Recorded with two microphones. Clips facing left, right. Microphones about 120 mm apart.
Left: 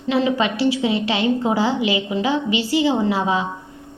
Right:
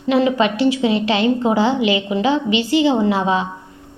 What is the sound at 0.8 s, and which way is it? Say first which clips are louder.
Speech: right 3 dB; 20° left (ahead or behind).